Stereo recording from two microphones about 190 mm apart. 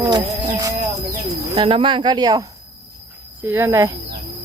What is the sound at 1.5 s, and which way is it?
Speech, 30° right (ahead or behind).